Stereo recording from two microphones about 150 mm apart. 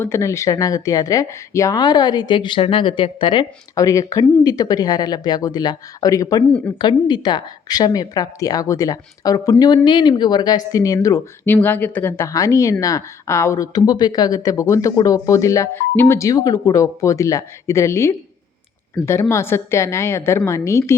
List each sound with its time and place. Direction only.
0.0 s speech: 20° left (ahead or behind)
3.8 s speech: 20° left (ahead or behind)
19.3 s a woman's voice: 15° left (ahead or behind)